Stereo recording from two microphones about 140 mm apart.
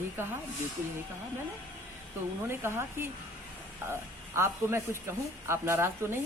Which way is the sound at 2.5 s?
20° right (ahead or behind).